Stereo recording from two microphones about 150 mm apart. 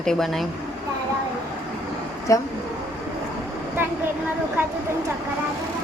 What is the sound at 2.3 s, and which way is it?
Speech, 20° left (ahead or behind).